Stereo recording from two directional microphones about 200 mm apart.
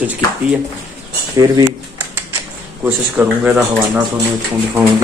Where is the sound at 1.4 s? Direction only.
20° right (ahead or behind).